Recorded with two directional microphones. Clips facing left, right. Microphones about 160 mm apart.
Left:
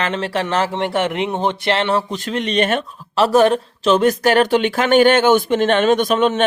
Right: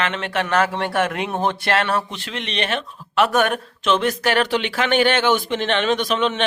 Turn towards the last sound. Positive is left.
turn(degrees=45)  # may be behind; listen again after turning